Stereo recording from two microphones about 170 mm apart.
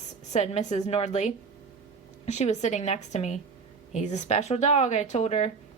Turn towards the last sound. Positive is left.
turn(degrees=40)  # may be behind; listen again after turning